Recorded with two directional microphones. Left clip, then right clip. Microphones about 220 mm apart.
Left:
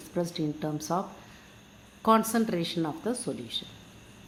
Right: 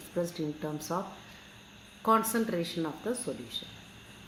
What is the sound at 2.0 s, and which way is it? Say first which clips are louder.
Speech: left 3 dB; 50° left (ahead or behind).